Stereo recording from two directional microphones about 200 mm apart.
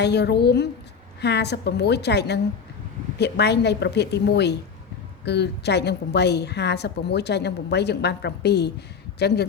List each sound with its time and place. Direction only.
0.0 s a woman's voice: 55° left (ahead or behind)